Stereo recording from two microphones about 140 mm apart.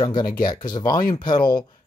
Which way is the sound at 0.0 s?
30° left (ahead or behind).